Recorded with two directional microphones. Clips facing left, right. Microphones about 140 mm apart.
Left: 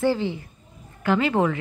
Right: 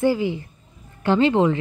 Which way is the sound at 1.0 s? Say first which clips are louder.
Right 4 dB; 30° right (ahead or behind).